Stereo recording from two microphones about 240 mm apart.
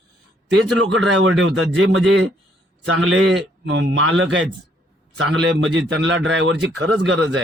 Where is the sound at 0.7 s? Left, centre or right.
Right.